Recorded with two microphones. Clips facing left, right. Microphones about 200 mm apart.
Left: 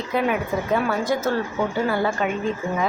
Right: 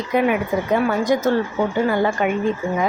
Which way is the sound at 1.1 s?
15° right (ahead or behind).